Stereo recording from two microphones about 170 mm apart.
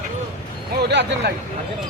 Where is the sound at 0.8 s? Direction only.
75° right (ahead or behind).